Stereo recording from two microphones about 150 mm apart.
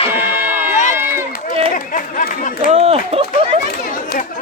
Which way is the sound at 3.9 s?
65° left (ahead or behind).